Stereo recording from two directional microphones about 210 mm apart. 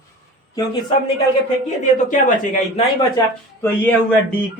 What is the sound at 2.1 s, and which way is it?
Speech, 35° left (ahead or behind).